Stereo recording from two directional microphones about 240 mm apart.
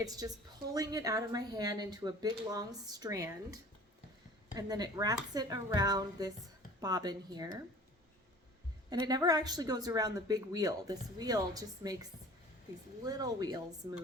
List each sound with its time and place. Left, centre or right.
0.0 s a woman's voice: centre
8.9 s a woman's voice: centre
13.1 s a woman's voice: centre